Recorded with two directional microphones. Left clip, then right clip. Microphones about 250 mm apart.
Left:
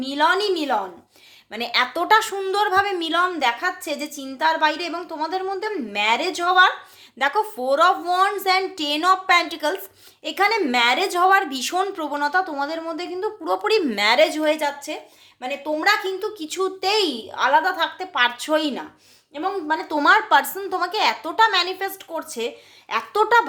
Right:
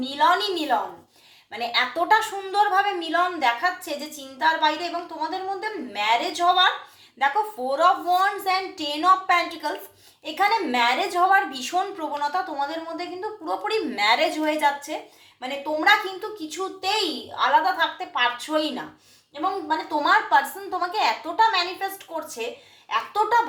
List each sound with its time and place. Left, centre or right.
0.0 s a woman's voice: left
1.5 s a woman's voice: left
7.7 s a woman's voice: left